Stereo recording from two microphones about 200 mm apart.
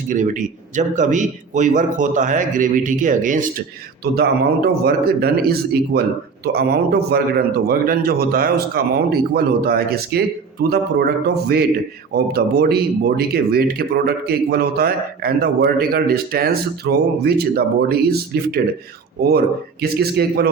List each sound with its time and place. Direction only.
0.1 s a man's voice: 40° right (ahead or behind)
4.0 s speech: 50° right (ahead or behind)
19.8 s speech: 50° right (ahead or behind)